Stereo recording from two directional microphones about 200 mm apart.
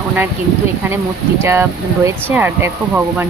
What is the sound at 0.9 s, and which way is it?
Speech, 10° right (ahead or behind).